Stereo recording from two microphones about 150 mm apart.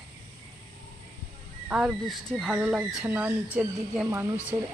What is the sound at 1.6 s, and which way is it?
Speech, 10° right (ahead or behind).